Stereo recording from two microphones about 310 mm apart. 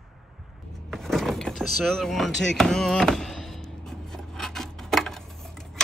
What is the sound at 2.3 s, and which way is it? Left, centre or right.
Music, left.